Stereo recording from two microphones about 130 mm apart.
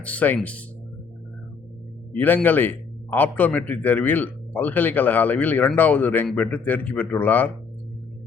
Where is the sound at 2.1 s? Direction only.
15° left (ahead or behind).